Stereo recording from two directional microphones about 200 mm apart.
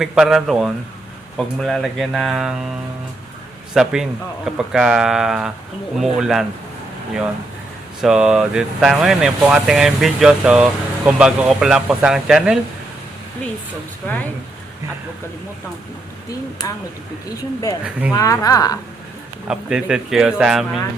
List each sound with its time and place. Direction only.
0.0 s speech: centre (ahead or behind)
3.8 s speech: centre (ahead or behind)
8.0 s speech: 5° right (ahead or behind)
16.6 s speech: 20° left (ahead or behind)
19.5 s speech: 5° right (ahead or behind)